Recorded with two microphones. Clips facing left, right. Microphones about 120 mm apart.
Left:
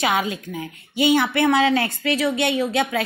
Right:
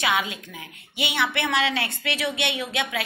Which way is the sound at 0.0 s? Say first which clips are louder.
Left 4 dB; 35° left (ahead or behind).